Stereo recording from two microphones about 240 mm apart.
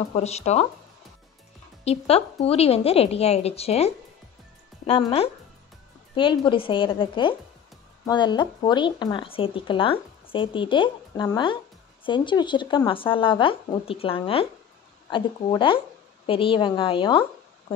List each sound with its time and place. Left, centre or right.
0.1 s speech: left
1.9 s speech: left